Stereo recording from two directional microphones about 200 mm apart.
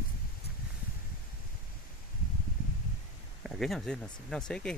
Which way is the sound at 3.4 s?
Centre (ahead or behind).